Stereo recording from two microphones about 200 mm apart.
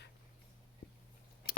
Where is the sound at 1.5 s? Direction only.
45° left (ahead or behind).